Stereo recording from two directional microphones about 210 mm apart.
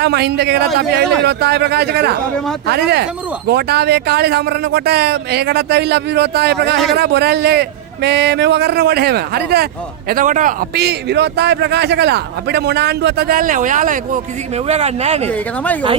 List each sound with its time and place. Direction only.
0.0 s a man's voice: 50° right (ahead or behind)
10.1 s a man's voice: 40° right (ahead or behind)
15.3 s speech: 5° left (ahead or behind)